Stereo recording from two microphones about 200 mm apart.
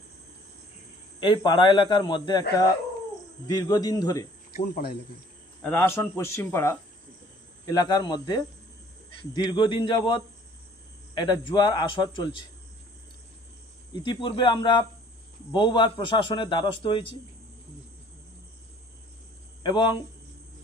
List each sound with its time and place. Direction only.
1.2 s a man's voice: 25° left (ahead or behind)
3.4 s a man's voice: 20° left (ahead or behind)
4.5 s speech: 45° left (ahead or behind)
5.6 s a man's voice: 10° left (ahead or behind)
13.9 s a man's voice: 25° left (ahead or behind)
19.6 s a man's voice: 20° left (ahead or behind)